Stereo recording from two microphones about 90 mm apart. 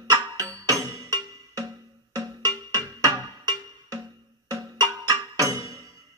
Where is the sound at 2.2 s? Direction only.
45° right (ahead or behind).